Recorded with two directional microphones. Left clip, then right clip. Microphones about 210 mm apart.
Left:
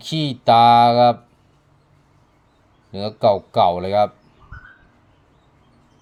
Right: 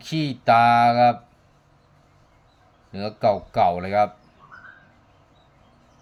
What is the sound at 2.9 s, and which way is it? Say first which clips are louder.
Speech: left 4 dB; 15° left (ahead or behind).